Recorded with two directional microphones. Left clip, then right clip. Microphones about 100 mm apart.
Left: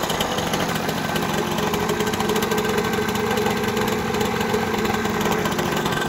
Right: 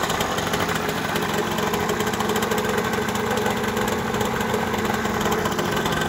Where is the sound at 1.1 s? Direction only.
5° left (ahead or behind).